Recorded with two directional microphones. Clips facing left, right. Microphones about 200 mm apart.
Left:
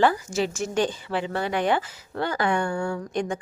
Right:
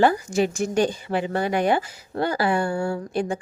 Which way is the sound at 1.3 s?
45° right (ahead or behind).